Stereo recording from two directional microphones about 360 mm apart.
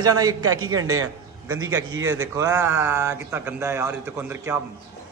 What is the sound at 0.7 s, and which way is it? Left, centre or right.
Speech, right.